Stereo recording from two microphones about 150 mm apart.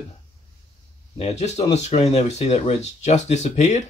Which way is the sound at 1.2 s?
45° left (ahead or behind).